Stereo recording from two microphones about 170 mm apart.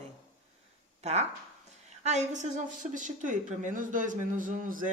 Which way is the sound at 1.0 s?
40° right (ahead or behind).